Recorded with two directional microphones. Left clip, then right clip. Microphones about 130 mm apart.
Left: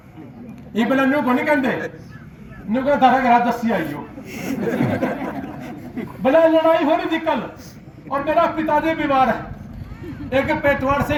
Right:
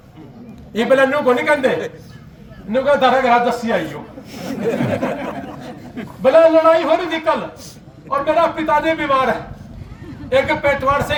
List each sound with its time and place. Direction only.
0.7 s a man's voice: 30° right (ahead or behind)
2.7 s a man's voice: 35° right (ahead or behind)
4.3 s speech: 65° right (ahead or behind)
4.6 s a sound: 20° right (ahead or behind)
6.2 s a man's voice: 30° right (ahead or behind)